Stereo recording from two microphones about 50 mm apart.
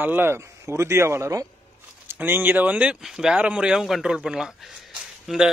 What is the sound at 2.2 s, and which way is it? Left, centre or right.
Speech, right.